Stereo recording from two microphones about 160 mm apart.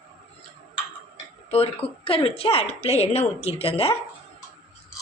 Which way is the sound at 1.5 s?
35° left (ahead or behind).